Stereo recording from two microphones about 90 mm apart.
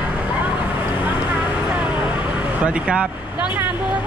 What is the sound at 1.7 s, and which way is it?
Vehicle, 15° right (ahead or behind).